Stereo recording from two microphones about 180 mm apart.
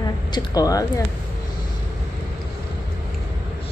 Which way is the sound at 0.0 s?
20° left (ahead or behind).